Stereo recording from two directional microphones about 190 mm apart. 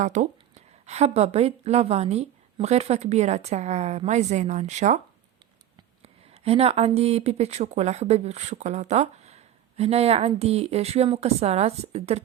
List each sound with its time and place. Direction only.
0.0 s speech: 40° right (ahead or behind)
6.0 s speech: 30° right (ahead or behind)